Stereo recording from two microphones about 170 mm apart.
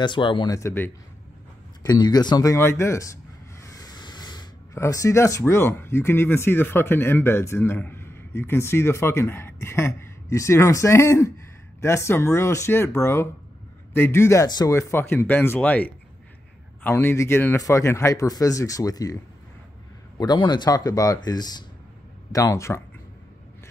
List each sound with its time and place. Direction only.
0.0 s speech: 30° left (ahead or behind)
0.6 s speech: 15° left (ahead or behind)
20.2 s speech: 25° left (ahead or behind)